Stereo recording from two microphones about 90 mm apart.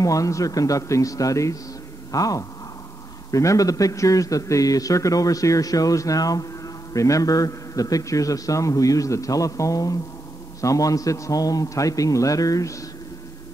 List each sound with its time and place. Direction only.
0.0 s a man's voice: 40° left (ahead or behind)